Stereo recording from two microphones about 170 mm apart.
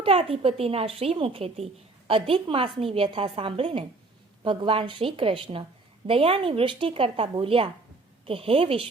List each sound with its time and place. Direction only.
0.0 s speech: 35° right (ahead or behind)